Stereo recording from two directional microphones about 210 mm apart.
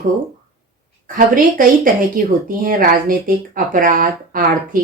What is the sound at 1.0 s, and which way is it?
Speech, 40° right (ahead or behind).